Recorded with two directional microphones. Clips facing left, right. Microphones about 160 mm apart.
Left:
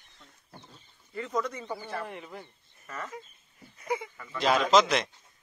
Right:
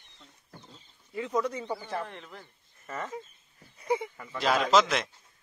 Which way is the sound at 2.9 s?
25° right (ahead or behind).